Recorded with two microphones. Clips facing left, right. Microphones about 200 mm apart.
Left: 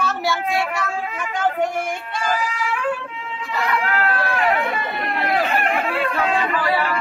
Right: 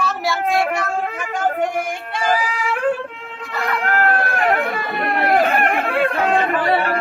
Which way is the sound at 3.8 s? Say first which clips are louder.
Right 3 dB; 50° right (ahead or behind).